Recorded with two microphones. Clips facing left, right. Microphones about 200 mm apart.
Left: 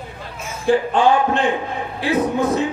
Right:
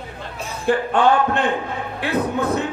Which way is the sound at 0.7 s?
60° right (ahead or behind).